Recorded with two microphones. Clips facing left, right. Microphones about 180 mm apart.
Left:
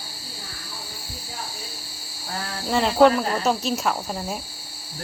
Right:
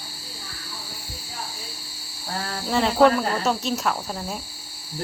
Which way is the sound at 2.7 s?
Centre (ahead or behind).